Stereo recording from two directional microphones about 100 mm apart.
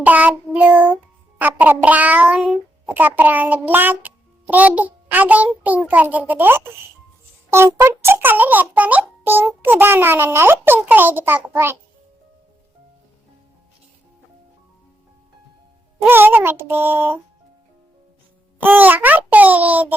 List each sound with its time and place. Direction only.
0.0 s a child's voice: 15° right (ahead or behind)
16.0 s a child's voice: 20° right (ahead or behind)
18.6 s a child's voice: 20° right (ahead or behind)